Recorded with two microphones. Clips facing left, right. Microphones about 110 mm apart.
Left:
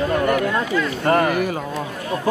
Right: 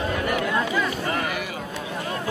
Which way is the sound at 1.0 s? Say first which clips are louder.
Left 9 dB; 50° left (ahead or behind).